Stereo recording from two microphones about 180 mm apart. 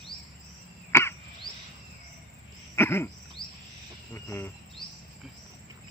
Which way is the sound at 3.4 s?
55° left (ahead or behind).